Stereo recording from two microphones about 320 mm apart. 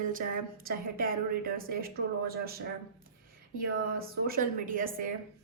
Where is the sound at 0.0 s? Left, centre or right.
Right.